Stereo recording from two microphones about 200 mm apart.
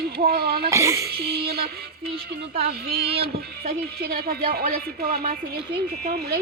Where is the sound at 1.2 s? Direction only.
50° right (ahead or behind).